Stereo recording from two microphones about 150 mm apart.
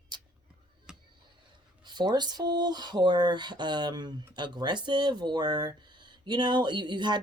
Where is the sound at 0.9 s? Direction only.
5° right (ahead or behind).